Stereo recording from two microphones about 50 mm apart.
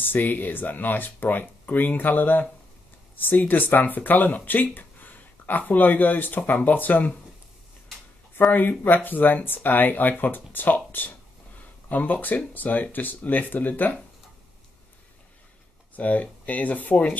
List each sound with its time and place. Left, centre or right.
0.0 s speech: left
8.5 s speech: left
16.0 s speech: left